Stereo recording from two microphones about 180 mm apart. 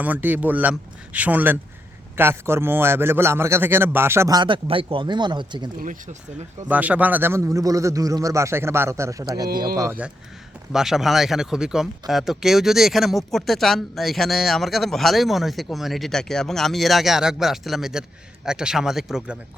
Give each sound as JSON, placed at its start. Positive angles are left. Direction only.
{"t": 0.0, "sound": "a man's voice", "side_deg": -10}
{"t": 6.7, "sound": "a man's voice", "side_deg": -10}
{"t": 10.7, "sound": "speech", "side_deg": 0}